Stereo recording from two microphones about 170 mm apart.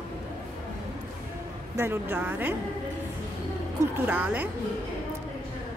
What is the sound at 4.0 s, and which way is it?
Speech, 10° right (ahead or behind).